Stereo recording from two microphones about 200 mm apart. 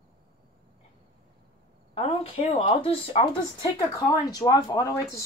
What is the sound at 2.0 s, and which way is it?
Speech, 30° left (ahead or behind).